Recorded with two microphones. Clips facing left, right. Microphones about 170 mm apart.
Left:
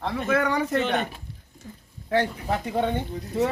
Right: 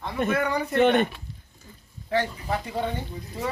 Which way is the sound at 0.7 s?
60° right (ahead or behind).